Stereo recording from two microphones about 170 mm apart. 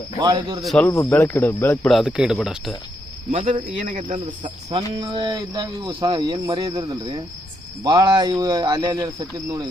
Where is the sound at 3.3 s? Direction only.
45° right (ahead or behind).